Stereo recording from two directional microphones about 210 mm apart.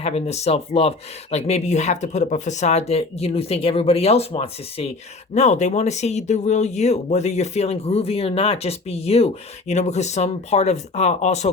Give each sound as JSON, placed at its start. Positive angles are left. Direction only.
{"t": 0.0, "sound": "speech", "side_deg": 30}